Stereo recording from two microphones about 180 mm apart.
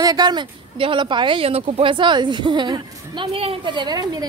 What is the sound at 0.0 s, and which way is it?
Speech, 20° right (ahead or behind).